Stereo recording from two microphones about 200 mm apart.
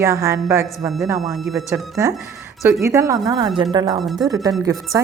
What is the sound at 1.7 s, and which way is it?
Speech, 15° right (ahead or behind).